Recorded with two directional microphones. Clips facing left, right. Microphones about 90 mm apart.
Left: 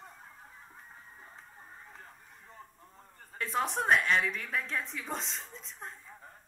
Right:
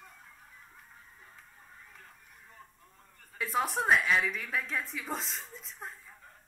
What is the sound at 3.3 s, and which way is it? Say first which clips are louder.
A woman's voice: right 1 dB; 5° right (ahead or behind).